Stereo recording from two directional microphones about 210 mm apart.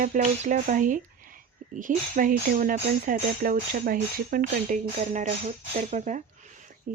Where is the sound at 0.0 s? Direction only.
35° right (ahead or behind).